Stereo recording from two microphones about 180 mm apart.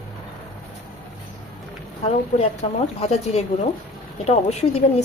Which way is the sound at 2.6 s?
35° left (ahead or behind).